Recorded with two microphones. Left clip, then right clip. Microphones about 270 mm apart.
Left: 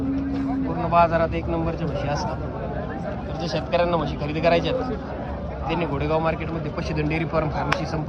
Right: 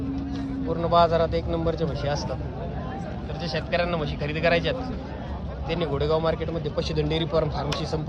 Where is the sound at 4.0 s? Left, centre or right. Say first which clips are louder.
Left 3 dB; right.